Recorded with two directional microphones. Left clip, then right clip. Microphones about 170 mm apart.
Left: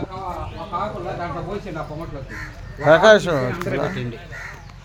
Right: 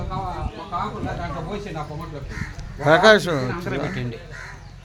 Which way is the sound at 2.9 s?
15° right (ahead or behind).